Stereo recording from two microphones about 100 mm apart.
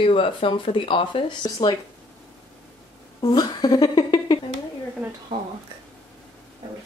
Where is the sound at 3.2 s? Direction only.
45° left (ahead or behind).